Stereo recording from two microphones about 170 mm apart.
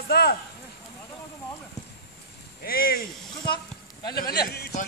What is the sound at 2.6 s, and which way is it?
Speech, 60° left (ahead or behind).